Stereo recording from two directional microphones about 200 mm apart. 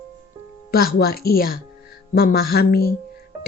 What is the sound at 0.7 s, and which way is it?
Speech, 50° left (ahead or behind).